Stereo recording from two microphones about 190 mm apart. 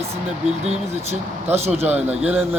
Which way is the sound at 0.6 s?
35° right (ahead or behind).